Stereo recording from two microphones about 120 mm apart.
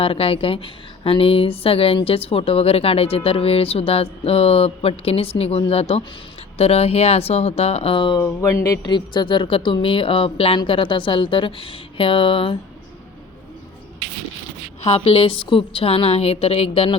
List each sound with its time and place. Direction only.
0.0 s speech: 50° left (ahead or behind)
8.2 s a woman's voice: 25° left (ahead or behind); by 12.5 s 45° left (ahead or behind)
14.8 s a woman's voice: 55° left (ahead or behind)